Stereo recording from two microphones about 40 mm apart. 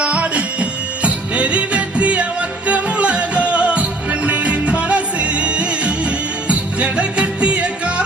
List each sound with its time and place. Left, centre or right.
0.0 s music: right